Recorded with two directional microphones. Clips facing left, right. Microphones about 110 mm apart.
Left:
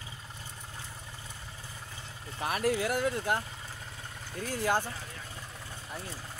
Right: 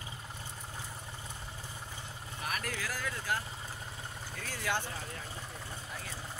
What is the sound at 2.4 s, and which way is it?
Speech, 30° left (ahead or behind).